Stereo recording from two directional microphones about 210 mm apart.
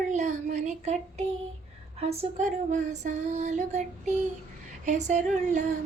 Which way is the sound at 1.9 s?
30° right (ahead or behind).